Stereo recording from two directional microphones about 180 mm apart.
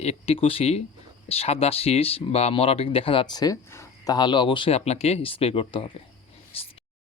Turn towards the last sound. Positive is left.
turn(degrees=30)  # may be behind; listen again after turning